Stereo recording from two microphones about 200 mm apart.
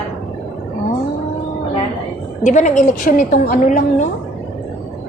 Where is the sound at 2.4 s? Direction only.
40° left (ahead or behind).